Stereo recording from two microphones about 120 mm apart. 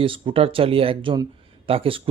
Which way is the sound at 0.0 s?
45° right (ahead or behind).